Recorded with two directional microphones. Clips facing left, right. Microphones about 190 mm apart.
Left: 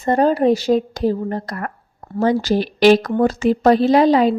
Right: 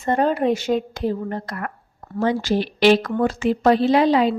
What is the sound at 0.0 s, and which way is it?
A woman's voice, 35° left (ahead or behind).